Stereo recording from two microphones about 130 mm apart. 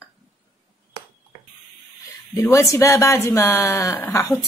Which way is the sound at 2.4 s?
25° left (ahead or behind).